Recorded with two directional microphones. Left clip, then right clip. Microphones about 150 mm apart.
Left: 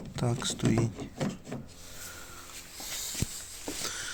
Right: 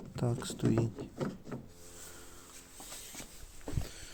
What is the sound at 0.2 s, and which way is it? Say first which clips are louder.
Speech: left 4 dB; 25° right (ahead or behind).